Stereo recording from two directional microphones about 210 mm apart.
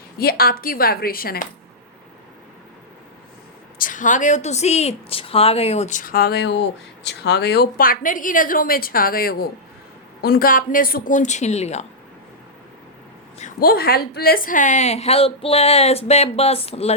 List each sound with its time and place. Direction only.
0.2 s a woman's voice: 45° left (ahead or behind)
3.8 s a woman's voice: 40° left (ahead or behind)
13.4 s a woman's voice: 45° left (ahead or behind); by 16.9 s 30° left (ahead or behind)